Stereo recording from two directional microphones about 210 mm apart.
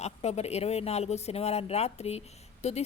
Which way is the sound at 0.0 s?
30° left (ahead or behind).